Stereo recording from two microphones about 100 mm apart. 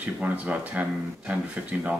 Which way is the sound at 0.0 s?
15° right (ahead or behind).